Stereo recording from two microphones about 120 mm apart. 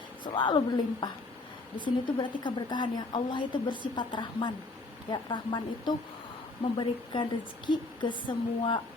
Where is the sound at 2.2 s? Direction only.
40° left (ahead or behind).